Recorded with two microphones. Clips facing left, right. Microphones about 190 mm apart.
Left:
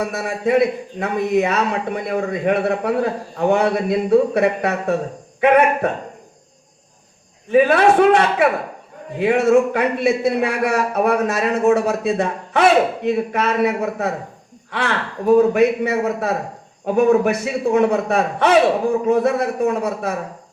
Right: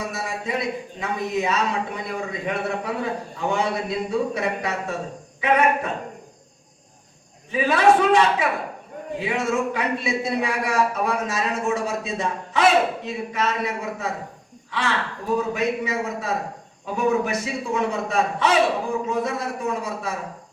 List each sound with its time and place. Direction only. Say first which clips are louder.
0.0 s a man's voice: left 8 dB; 60° left (ahead or behind)
7.5 s a man's voice: left 5 dB; 60° left (ahead or behind)